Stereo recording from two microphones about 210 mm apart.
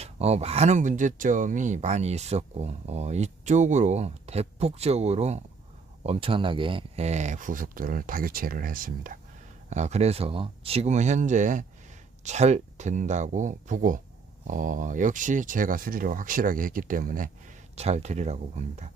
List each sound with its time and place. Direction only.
0.0 s speech: 30° right (ahead or behind)